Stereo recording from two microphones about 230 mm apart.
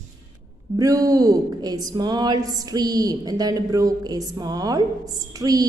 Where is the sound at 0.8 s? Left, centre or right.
Centre.